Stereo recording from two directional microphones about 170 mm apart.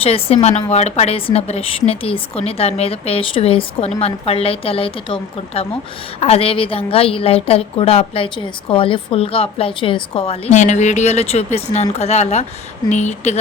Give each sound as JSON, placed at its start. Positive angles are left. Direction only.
{"t": 0.0, "sound": "a woman's voice", "side_deg": 35}